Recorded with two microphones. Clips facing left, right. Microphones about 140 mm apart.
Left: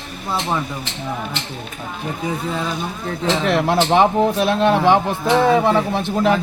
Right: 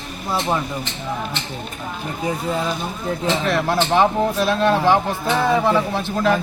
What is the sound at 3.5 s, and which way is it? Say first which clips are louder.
Speech: left 3 dB; 20° left (ahead or behind).